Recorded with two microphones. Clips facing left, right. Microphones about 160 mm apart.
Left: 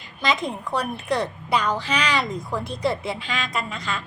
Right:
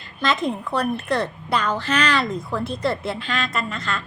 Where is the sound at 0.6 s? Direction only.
10° left (ahead or behind).